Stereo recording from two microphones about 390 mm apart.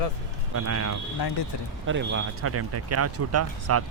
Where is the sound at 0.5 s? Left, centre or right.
Right.